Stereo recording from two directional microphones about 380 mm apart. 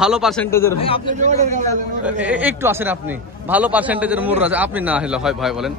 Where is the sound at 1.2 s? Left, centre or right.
Centre.